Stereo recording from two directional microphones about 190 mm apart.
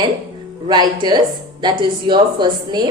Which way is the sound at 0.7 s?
20° right (ahead or behind).